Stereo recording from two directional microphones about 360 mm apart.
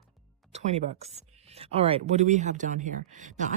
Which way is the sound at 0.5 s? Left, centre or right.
Centre.